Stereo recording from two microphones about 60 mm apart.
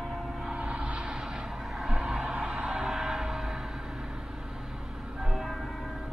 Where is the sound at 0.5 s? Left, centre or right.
Centre.